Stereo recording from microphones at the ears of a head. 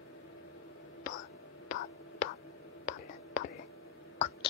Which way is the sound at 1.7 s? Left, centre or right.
Left.